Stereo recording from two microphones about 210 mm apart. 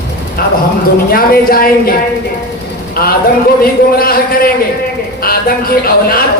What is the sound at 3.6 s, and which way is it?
Speech, 45° left (ahead or behind).